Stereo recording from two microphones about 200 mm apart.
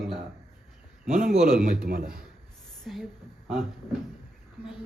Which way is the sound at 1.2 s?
45° right (ahead or behind).